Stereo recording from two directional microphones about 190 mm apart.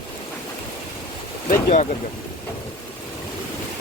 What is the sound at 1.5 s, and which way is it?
Speech, 50° left (ahead or behind).